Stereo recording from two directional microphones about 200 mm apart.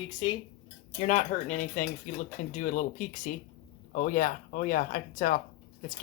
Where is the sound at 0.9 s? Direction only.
35° left (ahead or behind).